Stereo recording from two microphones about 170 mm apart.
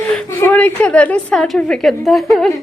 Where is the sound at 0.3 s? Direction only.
15° left (ahead or behind).